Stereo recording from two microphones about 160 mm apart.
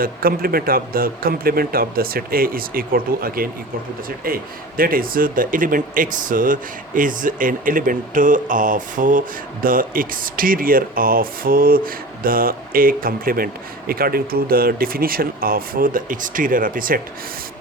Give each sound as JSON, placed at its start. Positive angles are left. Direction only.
{"t": 0.0, "sound": "speech", "side_deg": -65}